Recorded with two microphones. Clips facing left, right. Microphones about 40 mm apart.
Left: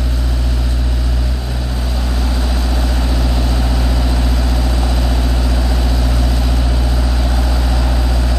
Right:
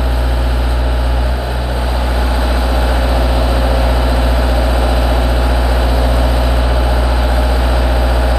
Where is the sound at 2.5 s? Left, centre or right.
Right.